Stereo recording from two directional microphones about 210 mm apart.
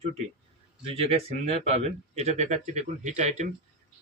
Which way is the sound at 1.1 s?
30° right (ahead or behind).